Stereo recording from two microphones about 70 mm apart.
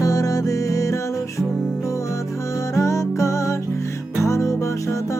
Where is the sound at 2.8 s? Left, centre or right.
Left.